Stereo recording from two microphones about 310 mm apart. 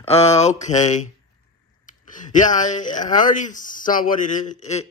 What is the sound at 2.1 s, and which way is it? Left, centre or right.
Speech, left.